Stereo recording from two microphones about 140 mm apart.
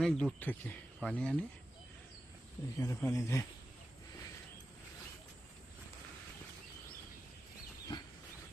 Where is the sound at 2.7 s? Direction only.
20° left (ahead or behind).